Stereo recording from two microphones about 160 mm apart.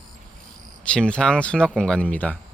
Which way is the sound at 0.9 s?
5° left (ahead or behind).